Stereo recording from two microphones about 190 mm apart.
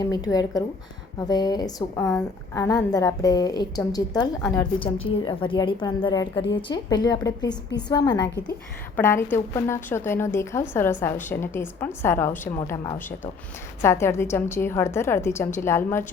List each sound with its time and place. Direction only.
0.0 s a woman's voice: 20° left (ahead or behind)
9.0 s a woman's voice: 10° left (ahead or behind)